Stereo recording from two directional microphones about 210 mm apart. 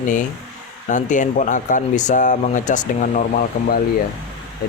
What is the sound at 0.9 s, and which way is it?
Speech, 35° left (ahead or behind).